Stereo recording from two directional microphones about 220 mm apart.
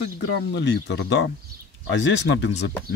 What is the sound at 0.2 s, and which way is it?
Speech, 55° left (ahead or behind).